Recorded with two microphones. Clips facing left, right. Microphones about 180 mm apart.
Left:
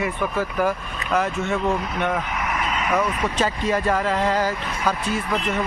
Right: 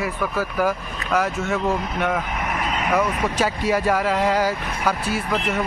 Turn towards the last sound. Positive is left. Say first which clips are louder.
# even
turn(degrees=-10)  # may be behind; listen again after turning